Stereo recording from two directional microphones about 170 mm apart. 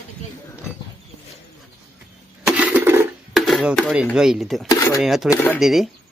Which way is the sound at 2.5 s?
10° right (ahead or behind).